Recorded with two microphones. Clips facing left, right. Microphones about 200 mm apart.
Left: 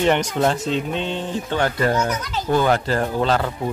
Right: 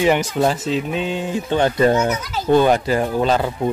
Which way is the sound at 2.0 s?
10° right (ahead or behind).